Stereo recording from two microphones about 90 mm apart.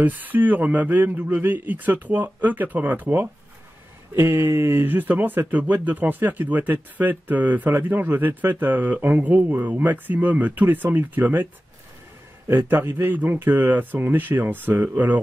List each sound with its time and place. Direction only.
0.0 s speech: 20° right (ahead or behind)
12.4 s speech: 25° right (ahead or behind)